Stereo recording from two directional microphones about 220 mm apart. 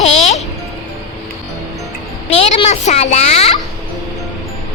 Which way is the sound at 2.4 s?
30° left (ahead or behind).